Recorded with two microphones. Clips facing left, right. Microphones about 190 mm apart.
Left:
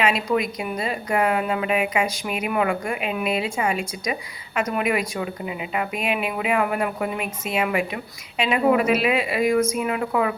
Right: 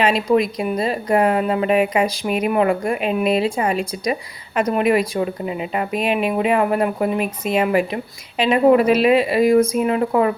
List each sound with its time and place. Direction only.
0.0 s a woman's voice: 35° right (ahead or behind)